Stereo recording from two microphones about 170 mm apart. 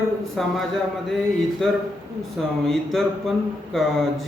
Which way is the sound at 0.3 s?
Centre (ahead or behind).